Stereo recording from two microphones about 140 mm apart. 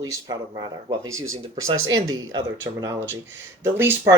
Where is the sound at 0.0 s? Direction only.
25° right (ahead or behind).